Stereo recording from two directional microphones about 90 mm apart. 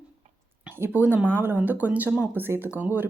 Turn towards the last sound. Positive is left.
turn(degrees=-20)  # may be behind; listen again after turning